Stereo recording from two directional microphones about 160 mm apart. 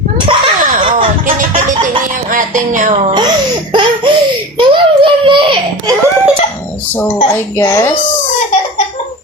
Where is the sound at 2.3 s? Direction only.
55° right (ahead or behind).